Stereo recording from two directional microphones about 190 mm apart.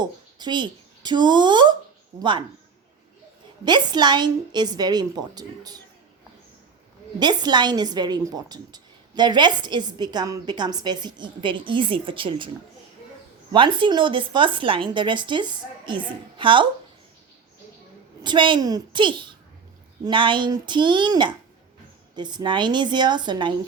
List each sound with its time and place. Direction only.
0.0 s a woman's voice: 25° right (ahead or behind)
3.6 s a woman's voice: 20° right (ahead or behind)
7.2 s a woman's voice: 20° right (ahead or behind)
13.5 s a woman's voice: 25° right (ahead or behind)
18.2 s a woman's voice: 25° right (ahead or behind)